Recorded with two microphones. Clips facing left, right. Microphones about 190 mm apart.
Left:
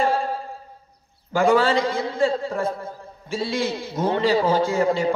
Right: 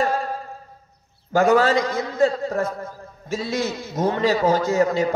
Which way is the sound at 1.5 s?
40° right (ahead or behind).